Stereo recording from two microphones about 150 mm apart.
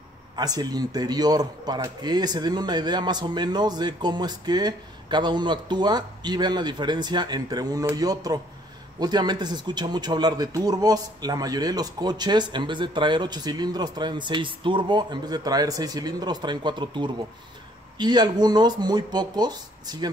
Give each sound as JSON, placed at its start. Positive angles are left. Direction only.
{"t": 0.4, "sound": "speech", "side_deg": -25}